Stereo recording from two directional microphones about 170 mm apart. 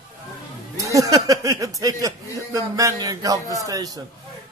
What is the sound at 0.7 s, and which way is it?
A man's voice, 20° right (ahead or behind).